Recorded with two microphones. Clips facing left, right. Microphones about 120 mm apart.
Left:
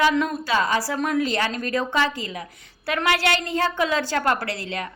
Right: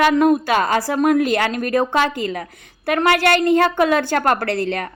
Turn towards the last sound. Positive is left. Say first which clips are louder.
# right 8 dB
turn(degrees=-55)  # may be behind; listen again after turning